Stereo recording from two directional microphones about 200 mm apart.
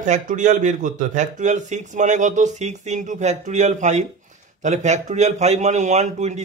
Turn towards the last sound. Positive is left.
turn(degrees=-35)  # may be behind; listen again after turning